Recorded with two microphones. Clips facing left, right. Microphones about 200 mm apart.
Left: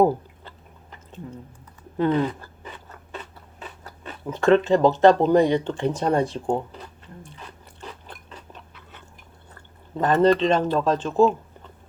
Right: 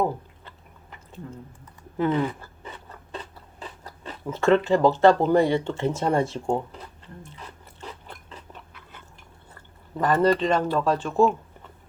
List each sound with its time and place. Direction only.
2.0 s a sound: 20° right (ahead or behind)
3.6 s biting: 30° right (ahead or behind)
4.3 s speech: 15° left (ahead or behind)
10.0 s speech: 25° left (ahead or behind)